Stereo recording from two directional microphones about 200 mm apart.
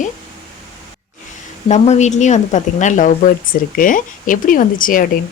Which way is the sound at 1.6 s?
35° left (ahead or behind).